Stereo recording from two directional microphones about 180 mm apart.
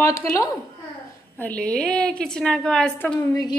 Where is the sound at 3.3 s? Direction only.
20° left (ahead or behind).